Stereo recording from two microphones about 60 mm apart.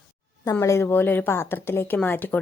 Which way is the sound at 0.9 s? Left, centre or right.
Left.